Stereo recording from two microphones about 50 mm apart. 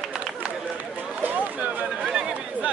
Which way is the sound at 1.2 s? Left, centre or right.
Right.